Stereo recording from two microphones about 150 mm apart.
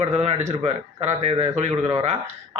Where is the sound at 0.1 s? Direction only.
45° right (ahead or behind).